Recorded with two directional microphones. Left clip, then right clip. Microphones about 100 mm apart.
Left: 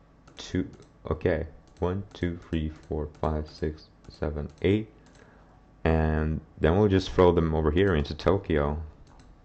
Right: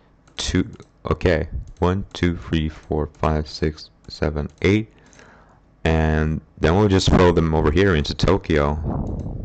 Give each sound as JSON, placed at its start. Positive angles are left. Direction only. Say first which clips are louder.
{"t": 0.4, "sound": "speech", "louder": "right 9 dB", "side_deg": -40}
{"t": 5.8, "sound": "speech", "louder": "right 6 dB", "side_deg": -10}